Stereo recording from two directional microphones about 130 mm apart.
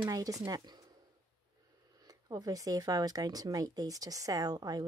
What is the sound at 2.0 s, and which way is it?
Speech, 30° right (ahead or behind).